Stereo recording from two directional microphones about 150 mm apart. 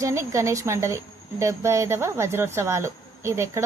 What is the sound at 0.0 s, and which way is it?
Speech, 20° right (ahead or behind).